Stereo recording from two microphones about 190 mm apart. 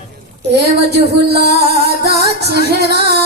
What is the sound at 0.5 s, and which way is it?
Music, 60° right (ahead or behind).